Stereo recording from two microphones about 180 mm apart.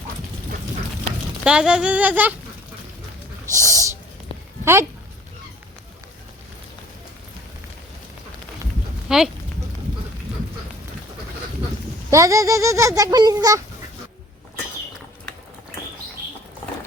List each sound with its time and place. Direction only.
1.5 s speech: 5° right (ahead or behind)
3.5 s speech: 20° right (ahead or behind)
9.0 s speech: centre (ahead or behind)
12.1 s a child's voice: 20° right (ahead or behind)